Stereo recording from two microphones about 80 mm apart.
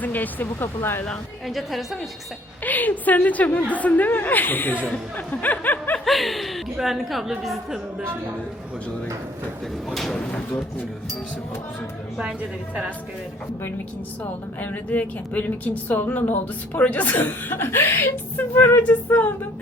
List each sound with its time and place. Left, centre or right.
0.0 s speech: left
1.5 s a woman's voice: centre
2.6 s speech: left
6.1 s a woman's voice: centre
9.9 s a woman's voice: centre
10.2 s speech: centre
12.1 s a woman's voice: centre
14.6 s speech: left